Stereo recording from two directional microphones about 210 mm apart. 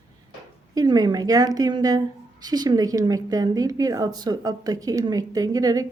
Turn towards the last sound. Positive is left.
turn(degrees=-15)  # may be behind; listen again after turning